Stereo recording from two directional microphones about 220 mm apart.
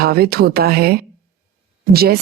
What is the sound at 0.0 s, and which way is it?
Speech, 45° right (ahead or behind).